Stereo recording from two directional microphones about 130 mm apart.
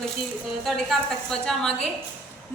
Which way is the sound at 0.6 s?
Centre (ahead or behind).